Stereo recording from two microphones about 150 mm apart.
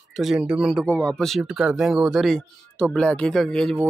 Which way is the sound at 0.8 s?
10° left (ahead or behind).